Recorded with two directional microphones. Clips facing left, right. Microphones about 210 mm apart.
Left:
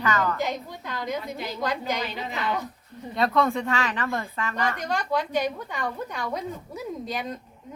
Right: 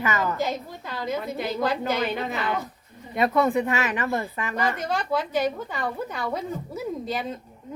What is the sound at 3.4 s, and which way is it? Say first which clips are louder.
A woman's voice: right 2 dB; 15° right (ahead or behind).